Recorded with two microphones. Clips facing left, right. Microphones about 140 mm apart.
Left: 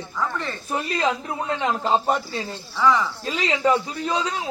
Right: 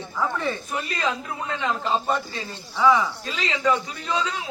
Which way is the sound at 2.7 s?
15° right (ahead or behind).